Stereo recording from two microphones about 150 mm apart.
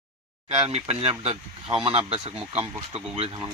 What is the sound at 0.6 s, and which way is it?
Speech, 45° right (ahead or behind).